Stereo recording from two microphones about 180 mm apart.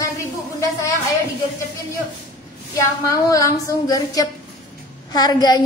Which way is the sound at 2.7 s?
20° left (ahead or behind).